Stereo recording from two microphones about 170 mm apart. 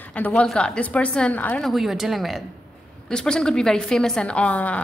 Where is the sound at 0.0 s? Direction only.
10° left (ahead or behind).